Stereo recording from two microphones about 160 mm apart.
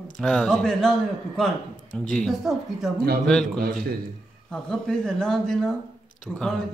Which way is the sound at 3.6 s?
65° right (ahead or behind).